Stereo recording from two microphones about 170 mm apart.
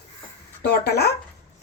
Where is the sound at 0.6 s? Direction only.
70° left (ahead or behind).